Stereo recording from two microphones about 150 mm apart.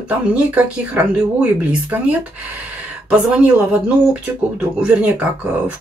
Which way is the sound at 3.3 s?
10° right (ahead or behind).